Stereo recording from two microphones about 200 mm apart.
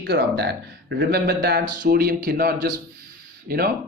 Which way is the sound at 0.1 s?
55° right (ahead or behind).